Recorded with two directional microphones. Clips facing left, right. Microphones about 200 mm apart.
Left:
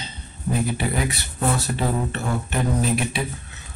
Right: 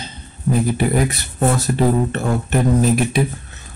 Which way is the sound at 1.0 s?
45° right (ahead or behind).